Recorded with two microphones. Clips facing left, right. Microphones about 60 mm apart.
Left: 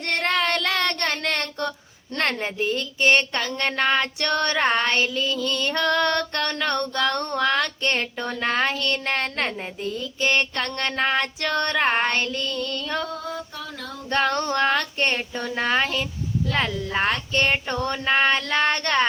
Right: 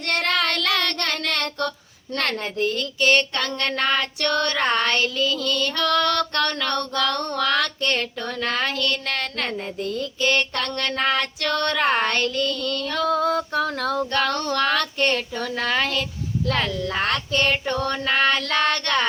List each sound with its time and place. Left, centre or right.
0.2 s child singing: left
2.1 s female singing: left
5.2 s music: right
5.5 s female singing: left
13.0 s female singing: right
14.1 s female singing: left
17.3 s female singing: left